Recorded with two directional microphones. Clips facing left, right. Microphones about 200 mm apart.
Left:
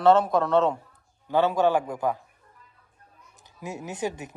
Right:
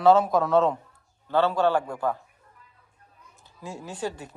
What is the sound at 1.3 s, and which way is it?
Speech, 15° left (ahead or behind).